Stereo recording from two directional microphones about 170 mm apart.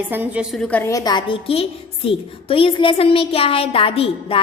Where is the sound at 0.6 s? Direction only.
15° left (ahead or behind).